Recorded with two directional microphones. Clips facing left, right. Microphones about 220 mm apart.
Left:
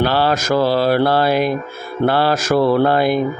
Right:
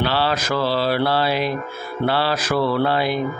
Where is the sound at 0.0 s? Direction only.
45° left (ahead or behind).